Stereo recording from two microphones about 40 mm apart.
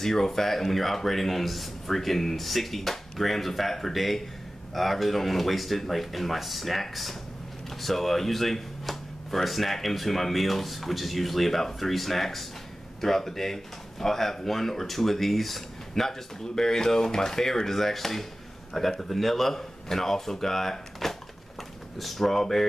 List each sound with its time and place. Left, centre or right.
0.0 s speech: centre